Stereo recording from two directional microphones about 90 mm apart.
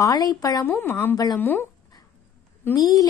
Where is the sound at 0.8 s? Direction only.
25° left (ahead or behind).